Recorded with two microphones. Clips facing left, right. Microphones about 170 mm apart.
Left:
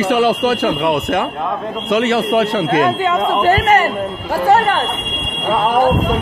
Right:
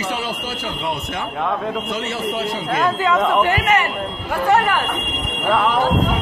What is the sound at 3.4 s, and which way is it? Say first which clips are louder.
Speech: left 6 dB; 40° left (ahead or behind).